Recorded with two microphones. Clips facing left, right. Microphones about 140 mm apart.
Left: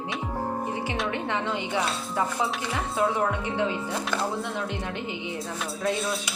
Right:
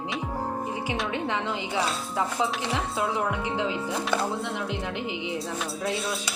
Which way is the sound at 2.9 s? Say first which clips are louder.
Left 6 dB; 15° right (ahead or behind).